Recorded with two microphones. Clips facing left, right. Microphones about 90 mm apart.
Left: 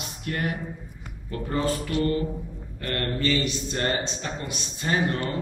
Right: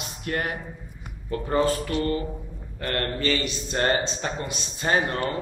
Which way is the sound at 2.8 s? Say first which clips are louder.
Right 1 dB; 55° right (ahead or behind).